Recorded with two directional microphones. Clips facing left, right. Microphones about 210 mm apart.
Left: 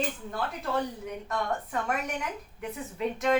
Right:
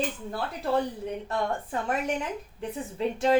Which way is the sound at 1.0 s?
30° right (ahead or behind).